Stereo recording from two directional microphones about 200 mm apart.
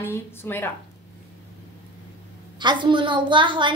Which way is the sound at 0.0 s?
10° left (ahead or behind).